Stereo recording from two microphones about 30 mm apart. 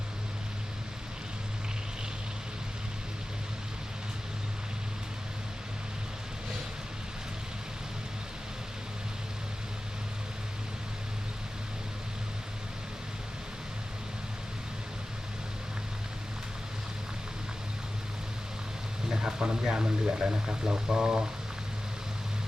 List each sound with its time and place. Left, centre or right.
19.1 s speech: right